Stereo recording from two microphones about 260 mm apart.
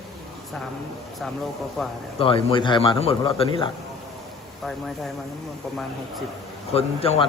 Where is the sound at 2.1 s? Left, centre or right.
Left.